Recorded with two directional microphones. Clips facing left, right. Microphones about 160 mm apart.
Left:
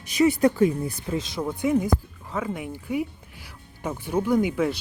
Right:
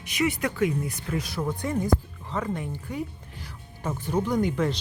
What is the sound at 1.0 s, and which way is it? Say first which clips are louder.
Speech: left 3 dB; 20° left (ahead or behind).